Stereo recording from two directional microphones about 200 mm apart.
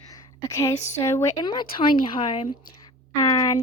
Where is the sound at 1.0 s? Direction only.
15° left (ahead or behind).